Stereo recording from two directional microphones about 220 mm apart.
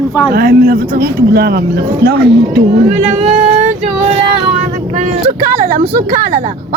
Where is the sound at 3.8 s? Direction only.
25° right (ahead or behind).